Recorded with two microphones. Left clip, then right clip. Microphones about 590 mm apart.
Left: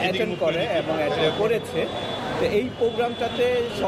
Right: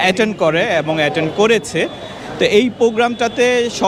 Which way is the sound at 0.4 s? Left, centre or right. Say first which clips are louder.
Right 8 dB; right.